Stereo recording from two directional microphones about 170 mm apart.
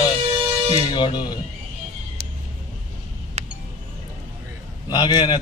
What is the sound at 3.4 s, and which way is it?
Music, 40° right (ahead or behind).